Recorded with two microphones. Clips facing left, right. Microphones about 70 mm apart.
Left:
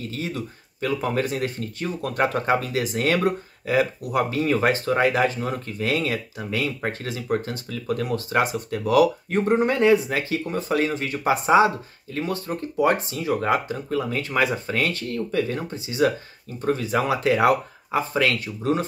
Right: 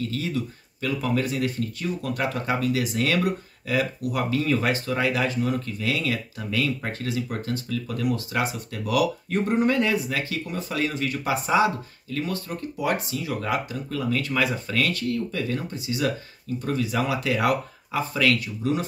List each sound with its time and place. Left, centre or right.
0.1 s speech: left
6.1 s speech: left